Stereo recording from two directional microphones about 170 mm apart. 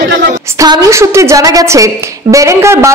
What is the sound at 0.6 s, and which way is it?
A woman's voice, 20° right (ahead or behind).